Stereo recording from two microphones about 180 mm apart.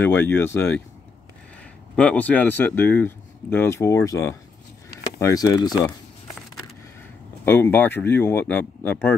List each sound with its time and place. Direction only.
0.0 s speech: 10° left (ahead or behind)
2.0 s speech: 10° left (ahead or behind)
7.4 s speech: 10° left (ahead or behind)